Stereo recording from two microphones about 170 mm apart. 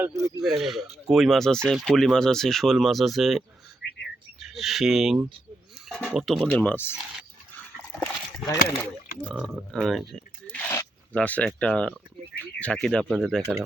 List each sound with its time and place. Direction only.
0.2 s speech: 20° right (ahead or behind)
0.6 s speech: centre (ahead or behind)
3.8 s bird: 75° left (ahead or behind)
4.4 s speech: centre (ahead or behind)
6.9 s a sound: 5° right (ahead or behind)
8.0 s speech: 15° left (ahead or behind)
9.6 s speech: centre (ahead or behind)